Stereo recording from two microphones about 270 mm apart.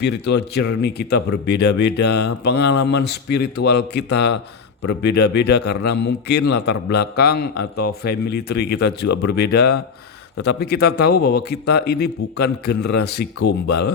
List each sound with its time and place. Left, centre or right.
0.0 s speech: left